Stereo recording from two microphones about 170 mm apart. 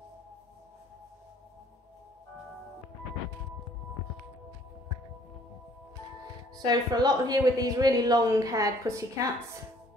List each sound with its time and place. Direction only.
6.5 s speech: 25° right (ahead or behind)